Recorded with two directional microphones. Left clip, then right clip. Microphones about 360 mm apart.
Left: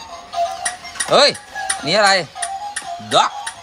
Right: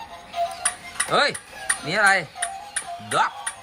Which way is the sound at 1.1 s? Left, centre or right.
Centre.